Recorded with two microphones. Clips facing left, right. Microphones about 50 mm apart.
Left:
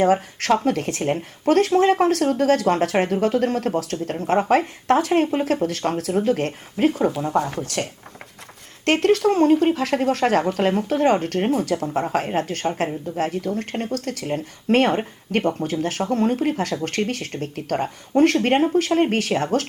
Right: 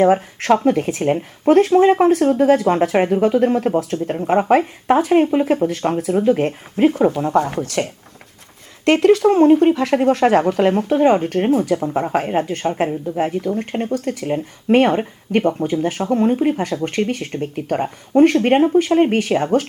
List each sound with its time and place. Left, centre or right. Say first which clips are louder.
0.4 s speech: right 5 dB; centre
7.6 s speech: right 5 dB; right
9.0 s speech: right 5 dB; centre